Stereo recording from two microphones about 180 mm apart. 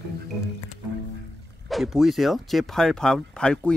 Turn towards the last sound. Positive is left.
turn(degrees=5)  # may be behind; listen again after turning